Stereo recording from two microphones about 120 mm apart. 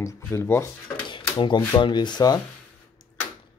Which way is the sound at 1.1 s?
45° left (ahead or behind).